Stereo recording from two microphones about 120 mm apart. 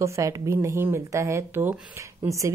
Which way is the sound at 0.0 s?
25° right (ahead or behind).